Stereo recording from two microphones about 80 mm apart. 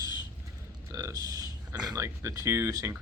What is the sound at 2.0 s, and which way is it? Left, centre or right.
Speech, right.